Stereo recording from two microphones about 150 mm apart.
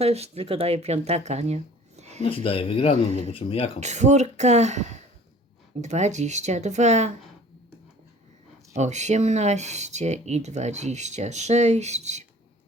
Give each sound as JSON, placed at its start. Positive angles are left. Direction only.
{"t": 0.0, "sound": "speech", "side_deg": -45}
{"t": 2.2, "sound": "speech", "side_deg": 35}
{"t": 3.8, "sound": "speech", "side_deg": -50}
{"t": 8.7, "sound": "speech", "side_deg": -50}